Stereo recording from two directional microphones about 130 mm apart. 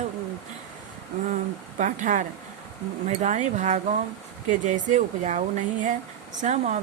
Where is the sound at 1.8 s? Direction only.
75° right (ahead or behind).